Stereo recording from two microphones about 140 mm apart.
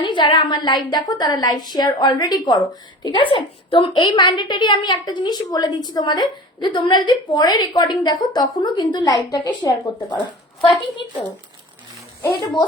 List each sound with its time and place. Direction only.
0.0 s a woman's voice: 35° left (ahead or behind)